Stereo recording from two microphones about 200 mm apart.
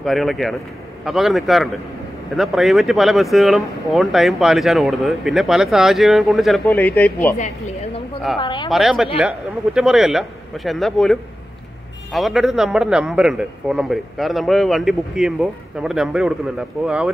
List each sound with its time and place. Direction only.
0.0 s a man's voice: centre (ahead or behind)
7.3 s speech: 35° left (ahead or behind)
8.4 s speech: 25° left (ahead or behind)
8.6 s a man's voice: centre (ahead or behind)